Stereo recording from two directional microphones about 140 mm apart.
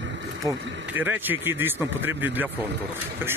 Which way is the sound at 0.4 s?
25° right (ahead or behind).